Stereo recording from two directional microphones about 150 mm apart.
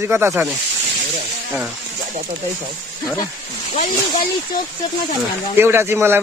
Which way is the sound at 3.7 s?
50° left (ahead or behind).